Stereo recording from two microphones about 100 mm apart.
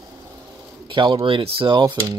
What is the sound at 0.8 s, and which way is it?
Speech, 55° right (ahead or behind).